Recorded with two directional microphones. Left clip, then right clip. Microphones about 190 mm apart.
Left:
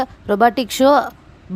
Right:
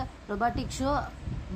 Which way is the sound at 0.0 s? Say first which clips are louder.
Left 15 dB; 50° left (ahead or behind).